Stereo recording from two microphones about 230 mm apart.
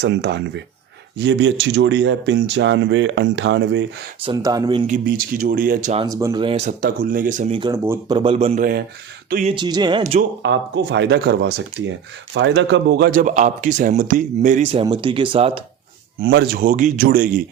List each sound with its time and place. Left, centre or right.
0.0 s speech: right
4.2 s speech: centre
4.9 s speech: right
6.0 s speech: centre; by 9.6 s right
9.6 s speech: centre
10.0 s speech: right
10.4 s speech: right
16.2 s speech: right